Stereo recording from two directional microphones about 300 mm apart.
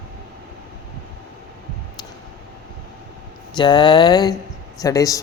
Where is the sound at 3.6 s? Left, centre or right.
Centre.